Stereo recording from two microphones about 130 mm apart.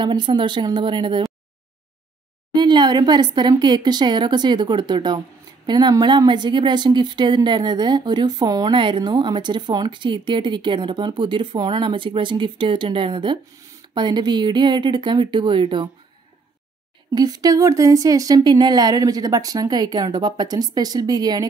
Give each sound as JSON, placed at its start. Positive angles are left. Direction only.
{"t": 0.0, "sound": "a woman's voice", "side_deg": -35}
{"t": 2.5, "sound": "a woman's voice", "side_deg": -35}
{"t": 17.1, "sound": "speech", "side_deg": -30}